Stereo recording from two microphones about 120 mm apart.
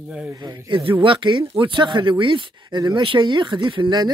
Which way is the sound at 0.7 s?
45° right (ahead or behind).